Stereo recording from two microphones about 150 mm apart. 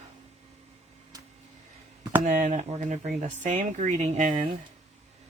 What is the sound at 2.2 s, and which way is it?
Speech, 60° right (ahead or behind).